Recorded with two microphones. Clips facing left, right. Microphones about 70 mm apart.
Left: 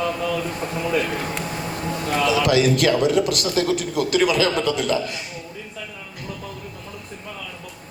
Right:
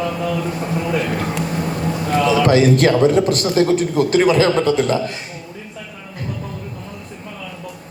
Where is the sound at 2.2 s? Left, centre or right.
Right.